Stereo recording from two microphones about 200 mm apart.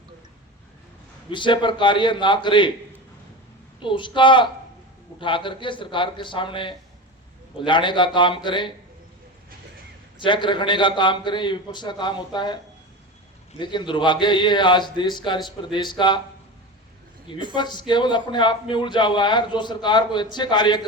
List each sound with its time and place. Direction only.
1.3 s a man's voice: 25° left (ahead or behind)
3.8 s a man's voice: 25° left (ahead or behind)
10.2 s a man's voice: 25° left (ahead or behind)
17.6 s a man's voice: 20° left (ahead or behind)